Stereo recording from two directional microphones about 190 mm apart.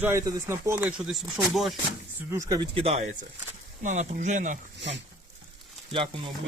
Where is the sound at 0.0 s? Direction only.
15° right (ahead or behind).